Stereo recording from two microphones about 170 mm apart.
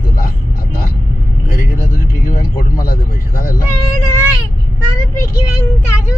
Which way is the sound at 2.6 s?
65° left (ahead or behind).